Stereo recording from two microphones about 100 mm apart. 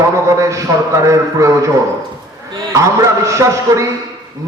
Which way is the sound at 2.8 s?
30° right (ahead or behind).